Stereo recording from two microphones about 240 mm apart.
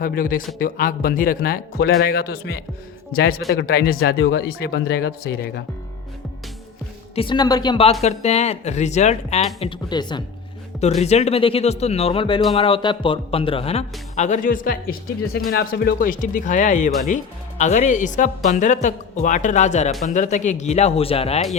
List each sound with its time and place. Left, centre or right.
0.0 s speech: left
7.2 s speech: centre